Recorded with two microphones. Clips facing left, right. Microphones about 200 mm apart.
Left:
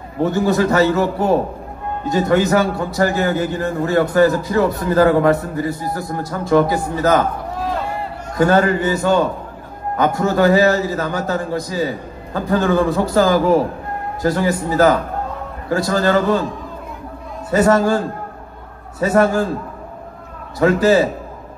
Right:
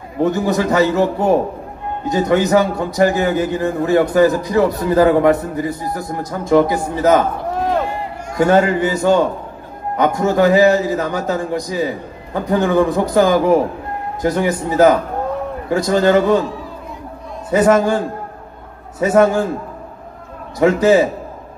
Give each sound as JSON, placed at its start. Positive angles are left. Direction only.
{"t": 0.2, "sound": "a man's voice", "side_deg": -20}
{"t": 8.4, "sound": "a man's voice", "side_deg": -20}
{"t": 17.5, "sound": "a man's voice", "side_deg": -20}
{"t": 20.5, "sound": "a man's voice", "side_deg": -20}